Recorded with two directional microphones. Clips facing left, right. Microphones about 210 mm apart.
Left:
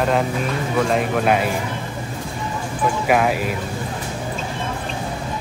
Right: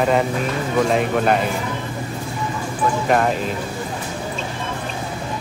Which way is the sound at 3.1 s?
5° left (ahead or behind).